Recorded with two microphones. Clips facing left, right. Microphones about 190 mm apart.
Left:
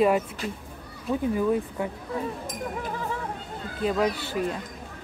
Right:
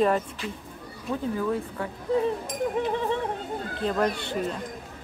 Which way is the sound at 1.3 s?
15° left (ahead or behind).